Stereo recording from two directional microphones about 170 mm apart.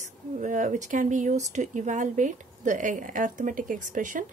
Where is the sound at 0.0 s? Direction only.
45° right (ahead or behind).